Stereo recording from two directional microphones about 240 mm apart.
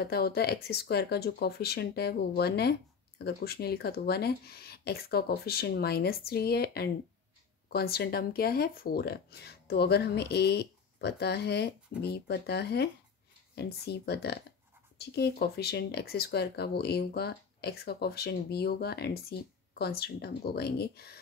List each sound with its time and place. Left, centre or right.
0.0 s speech: left